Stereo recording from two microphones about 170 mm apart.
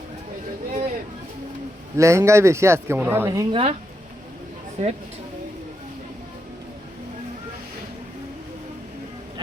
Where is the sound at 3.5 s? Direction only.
35° right (ahead or behind).